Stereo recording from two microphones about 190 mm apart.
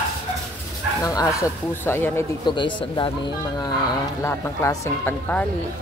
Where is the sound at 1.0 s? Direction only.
15° left (ahead or behind).